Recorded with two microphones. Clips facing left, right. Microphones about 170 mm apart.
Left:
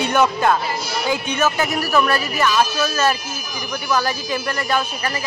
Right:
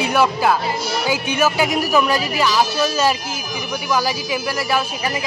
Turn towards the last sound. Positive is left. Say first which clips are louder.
# right 1 dB
turn(degrees=-10)  # may be behind; listen again after turning